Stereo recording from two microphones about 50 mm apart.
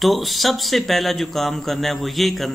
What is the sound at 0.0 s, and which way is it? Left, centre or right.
Speech, centre.